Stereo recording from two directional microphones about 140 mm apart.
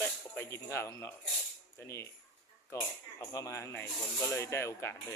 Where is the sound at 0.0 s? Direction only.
15° left (ahead or behind).